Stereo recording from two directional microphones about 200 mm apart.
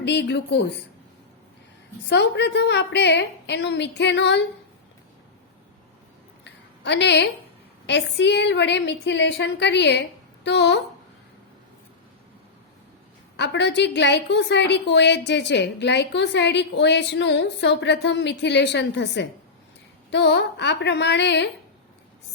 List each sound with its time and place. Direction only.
0.0 s a woman's voice: 60° left (ahead or behind)
2.0 s a woman's voice: 60° left (ahead or behind)
6.4 s a sound: 60° left (ahead or behind)
7.9 s a woman's voice: 60° left (ahead or behind)
13.3 s a woman's voice: 60° left (ahead or behind)